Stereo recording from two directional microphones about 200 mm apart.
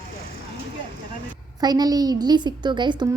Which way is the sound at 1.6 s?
20° right (ahead or behind).